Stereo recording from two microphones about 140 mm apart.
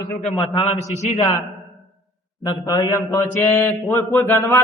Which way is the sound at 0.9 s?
55° left (ahead or behind).